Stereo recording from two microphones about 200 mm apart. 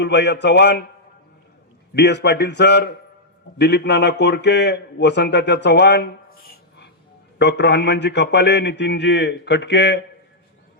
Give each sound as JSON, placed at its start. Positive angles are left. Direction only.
{"t": 0.0, "sound": "a man's voice", "side_deg": 60}
{"t": 1.9, "sound": "a man's voice", "side_deg": 55}